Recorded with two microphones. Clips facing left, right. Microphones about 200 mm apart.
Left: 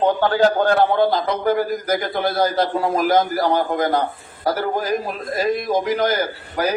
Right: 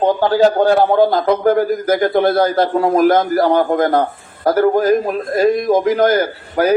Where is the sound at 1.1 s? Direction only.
55° right (ahead or behind).